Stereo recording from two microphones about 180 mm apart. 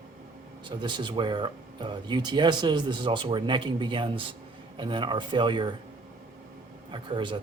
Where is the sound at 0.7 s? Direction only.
25° right (ahead or behind).